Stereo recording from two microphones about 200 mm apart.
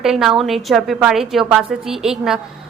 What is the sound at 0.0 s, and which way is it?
A woman's voice, centre (ahead or behind).